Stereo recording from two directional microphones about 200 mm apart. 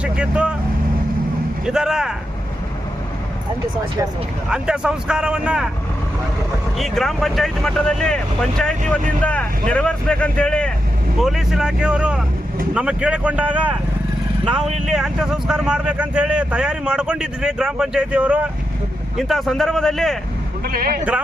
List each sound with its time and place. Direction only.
0.0 s speech: 5° right (ahead or behind)
1.6 s speech: 5° right (ahead or behind)
4.4 s speech: 5° right (ahead or behind)
6.7 s speech: centre (ahead or behind)
20.7 s speech: 50° right (ahead or behind)